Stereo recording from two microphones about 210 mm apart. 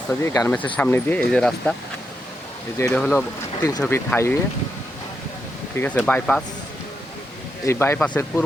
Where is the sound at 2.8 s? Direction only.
10° left (ahead or behind).